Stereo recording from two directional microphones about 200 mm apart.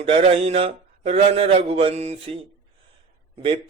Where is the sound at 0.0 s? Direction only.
30° right (ahead or behind).